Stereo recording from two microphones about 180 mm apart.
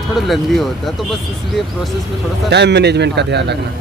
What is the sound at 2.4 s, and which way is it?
A man's voice, 70° right (ahead or behind).